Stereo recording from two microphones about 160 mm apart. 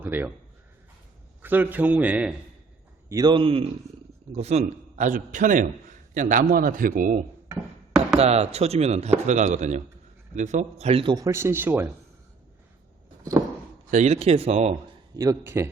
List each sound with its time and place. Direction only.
0.0 s a man's voice: 10° right (ahead or behind)
1.4 s a man's voice: 10° right (ahead or behind)
3.1 s a man's voice: 25° right (ahead or behind); by 7.2 s 60° right (ahead or behind)
8.2 s a man's voice: 40° right (ahead or behind); by 11.9 s 15° right (ahead or behind)
13.9 s speech: 45° right (ahead or behind)
15.1 s a man's voice: 20° right (ahead or behind)